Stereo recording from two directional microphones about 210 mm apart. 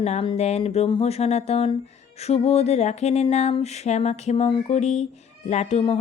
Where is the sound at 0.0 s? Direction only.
30° left (ahead or behind).